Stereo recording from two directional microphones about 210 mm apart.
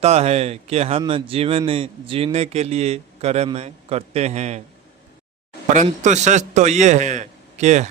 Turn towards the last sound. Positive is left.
turn(degrees=-35)  # may be behind; listen again after turning